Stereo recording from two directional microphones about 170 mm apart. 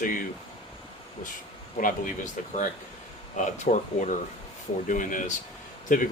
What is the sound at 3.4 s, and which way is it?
Speech, 45° left (ahead or behind).